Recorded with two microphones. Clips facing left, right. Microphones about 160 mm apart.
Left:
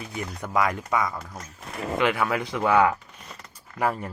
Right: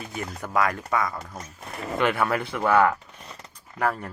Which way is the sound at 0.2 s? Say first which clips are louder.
Even; 15° left (ahead or behind).